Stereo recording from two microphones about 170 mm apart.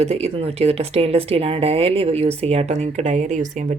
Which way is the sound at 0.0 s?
35° right (ahead or behind).